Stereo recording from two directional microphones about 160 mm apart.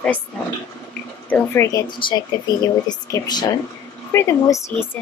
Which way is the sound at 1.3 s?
20° left (ahead or behind).